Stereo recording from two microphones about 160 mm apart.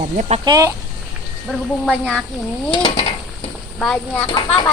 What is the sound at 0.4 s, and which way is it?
Speech, 20° right (ahead or behind).